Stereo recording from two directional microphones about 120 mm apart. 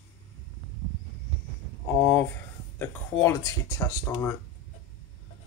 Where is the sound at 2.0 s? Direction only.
20° left (ahead or behind).